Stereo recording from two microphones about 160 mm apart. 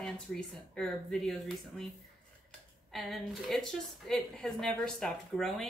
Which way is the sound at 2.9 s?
Centre (ahead or behind).